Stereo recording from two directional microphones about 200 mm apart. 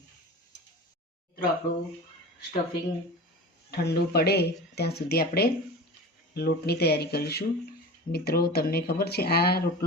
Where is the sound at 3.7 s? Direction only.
55° left (ahead or behind).